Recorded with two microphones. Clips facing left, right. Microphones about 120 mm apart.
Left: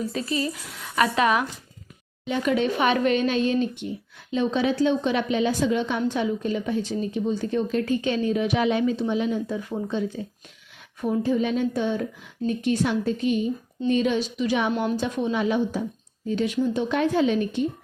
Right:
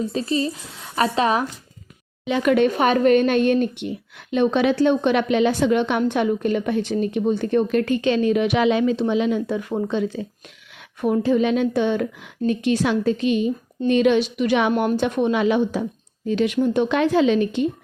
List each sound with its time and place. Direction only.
0.0 s speech: 30° right (ahead or behind)
2.2 s speech: 70° right (ahead or behind)
2.7 s a woman's voice: 40° right (ahead or behind); by 14.7 s 70° right (ahead or behind)
14.7 s a woman's voice: 55° right (ahead or behind); by 17.7 s 90° right